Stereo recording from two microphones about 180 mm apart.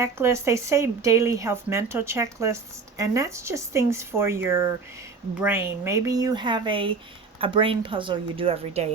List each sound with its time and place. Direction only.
0.0 s speech: 15° right (ahead or behind); by 8.9 s 35° right (ahead or behind)